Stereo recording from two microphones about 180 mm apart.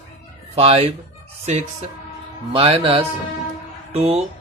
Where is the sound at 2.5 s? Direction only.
30° right (ahead or behind).